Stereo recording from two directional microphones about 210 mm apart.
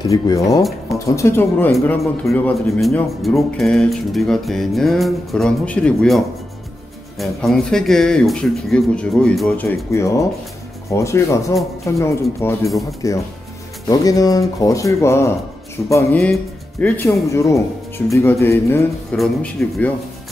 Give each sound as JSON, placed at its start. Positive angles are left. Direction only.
{"t": 0.0, "sound": "speech", "side_deg": 15}